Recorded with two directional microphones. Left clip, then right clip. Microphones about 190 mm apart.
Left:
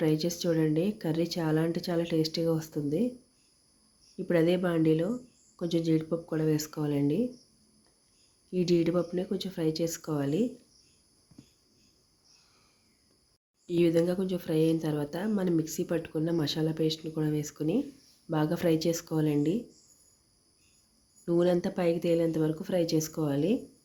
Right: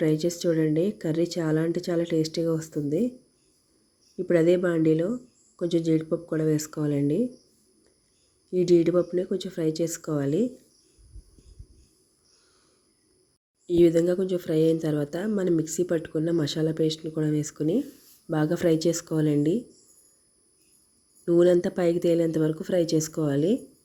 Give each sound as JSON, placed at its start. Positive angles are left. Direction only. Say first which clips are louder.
{"t": 0.0, "sound": "a woman's voice", "louder": "right 4 dB", "side_deg": -15}
{"t": 4.3, "sound": "a woman's voice", "louder": "right 5 dB", "side_deg": -15}
{"t": 8.4, "sound": "a woman's voice", "louder": "right 6 dB", "side_deg": -15}
{"t": 13.7, "sound": "speech", "louder": "right 6 dB", "side_deg": -20}
{"t": 21.2, "sound": "speech", "louder": "right 7 dB", "side_deg": -25}